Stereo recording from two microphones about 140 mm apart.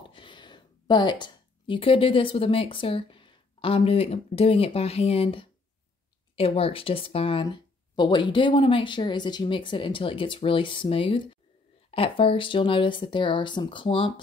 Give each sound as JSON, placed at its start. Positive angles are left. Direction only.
{"t": 0.0, "sound": "speech", "side_deg": 35}